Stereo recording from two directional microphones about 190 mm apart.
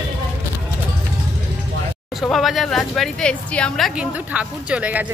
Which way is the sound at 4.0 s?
5° right (ahead or behind).